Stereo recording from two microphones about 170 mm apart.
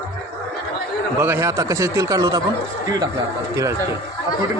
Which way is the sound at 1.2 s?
15° right (ahead or behind).